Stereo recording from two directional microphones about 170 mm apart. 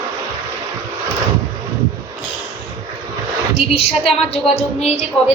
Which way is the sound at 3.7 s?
35° left (ahead or behind).